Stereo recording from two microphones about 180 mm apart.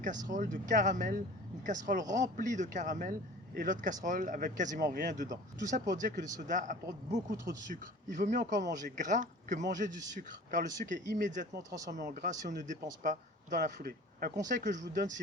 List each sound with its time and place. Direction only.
0.3 s speech: 45° right (ahead or behind)